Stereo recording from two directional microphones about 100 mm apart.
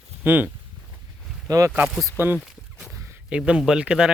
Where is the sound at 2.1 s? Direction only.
20° right (ahead or behind).